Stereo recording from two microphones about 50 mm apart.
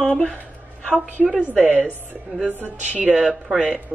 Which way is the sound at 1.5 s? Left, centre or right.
Right.